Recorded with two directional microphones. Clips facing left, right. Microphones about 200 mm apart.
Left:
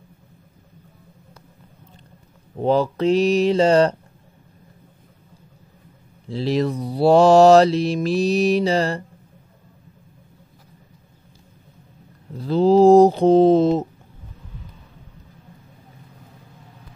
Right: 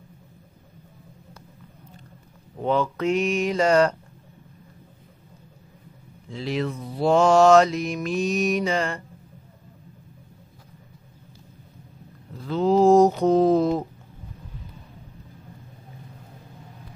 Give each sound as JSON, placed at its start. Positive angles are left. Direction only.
{"t": 2.5, "sound": "mantra", "side_deg": 35}
{"t": 6.2, "sound": "mantra", "side_deg": 35}
{"t": 12.4, "sound": "mantra", "side_deg": 35}